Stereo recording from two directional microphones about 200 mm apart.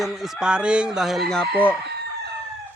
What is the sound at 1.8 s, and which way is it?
Chicken, 55° right (ahead or behind).